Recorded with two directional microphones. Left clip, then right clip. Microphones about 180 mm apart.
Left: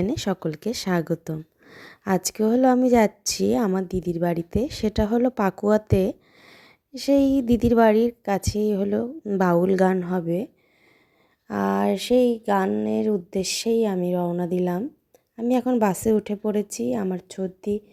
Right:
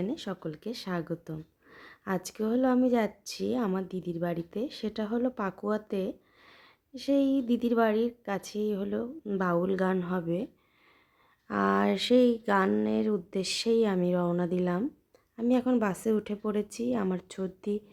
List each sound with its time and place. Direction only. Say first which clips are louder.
0.0 s a woman's voice: left 9 dB; 40° left (ahead or behind); by 17.8 s 15° left (ahead or behind)